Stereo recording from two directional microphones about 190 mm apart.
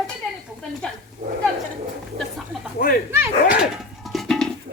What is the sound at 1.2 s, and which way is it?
Speech, 40° right (ahead or behind).